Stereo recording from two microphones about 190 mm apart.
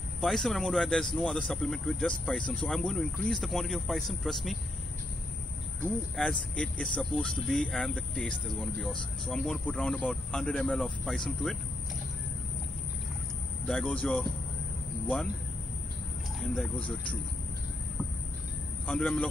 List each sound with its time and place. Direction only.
0.2 s speech: centre (ahead or behind)
6.1 s speech: 5° left (ahead or behind)
13.7 s speech: 5° left (ahead or behind)
16.3 s speech: centre (ahead or behind)
18.9 s speech: 5° left (ahead or behind)